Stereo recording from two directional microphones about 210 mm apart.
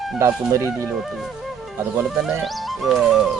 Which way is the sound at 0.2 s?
15° right (ahead or behind).